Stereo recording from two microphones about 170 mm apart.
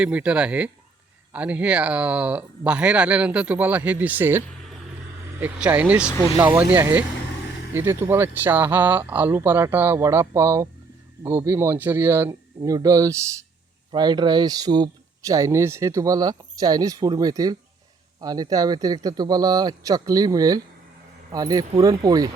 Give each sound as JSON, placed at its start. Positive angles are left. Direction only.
{"t": 0.0, "sound": "speech", "side_deg": -5}